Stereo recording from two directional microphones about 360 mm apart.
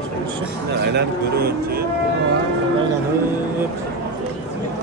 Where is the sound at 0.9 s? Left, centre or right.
Right.